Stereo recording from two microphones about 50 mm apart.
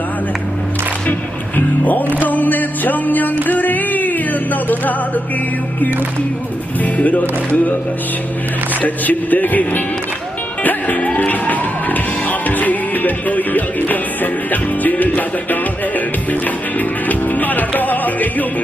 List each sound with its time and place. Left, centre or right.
1.5 s music: left
6.8 s music: left
8.8 s music: left